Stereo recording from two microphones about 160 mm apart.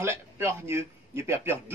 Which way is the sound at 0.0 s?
15° right (ahead or behind).